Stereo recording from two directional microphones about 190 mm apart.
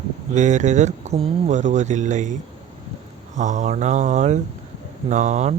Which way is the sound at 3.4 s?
40° right (ahead or behind).